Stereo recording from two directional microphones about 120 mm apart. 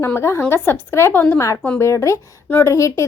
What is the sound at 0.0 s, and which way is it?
A woman's voice, 20° left (ahead or behind).